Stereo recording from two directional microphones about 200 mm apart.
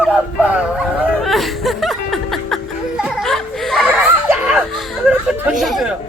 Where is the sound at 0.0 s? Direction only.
5° right (ahead or behind).